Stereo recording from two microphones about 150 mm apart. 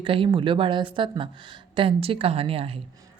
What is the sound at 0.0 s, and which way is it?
A woman's voice, 35° right (ahead or behind).